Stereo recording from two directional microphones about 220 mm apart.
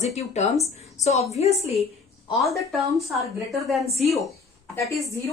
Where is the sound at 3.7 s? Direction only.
Centre (ahead or behind).